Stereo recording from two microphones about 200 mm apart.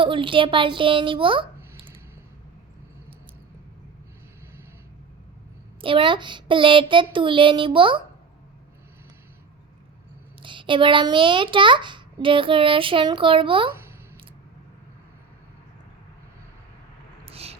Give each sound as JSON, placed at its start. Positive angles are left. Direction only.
{"t": 0.0, "sound": "a child's voice", "side_deg": -25}
{"t": 5.8, "sound": "a child's voice", "side_deg": -25}
{"t": 10.4, "sound": "a child's voice", "side_deg": -25}
{"t": 17.2, "sound": "a sound", "side_deg": -30}